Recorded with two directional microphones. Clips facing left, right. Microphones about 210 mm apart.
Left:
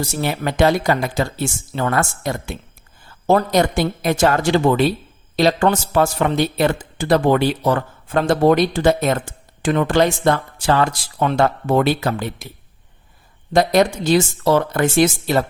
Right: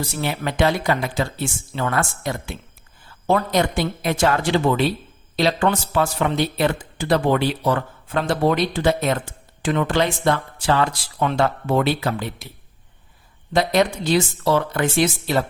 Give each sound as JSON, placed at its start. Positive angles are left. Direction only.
{"t": 0.0, "sound": "speech", "side_deg": 45}
{"t": 13.5, "sound": "speech", "side_deg": 45}